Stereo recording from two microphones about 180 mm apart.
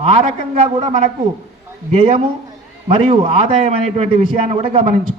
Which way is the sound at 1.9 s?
35° right (ahead or behind).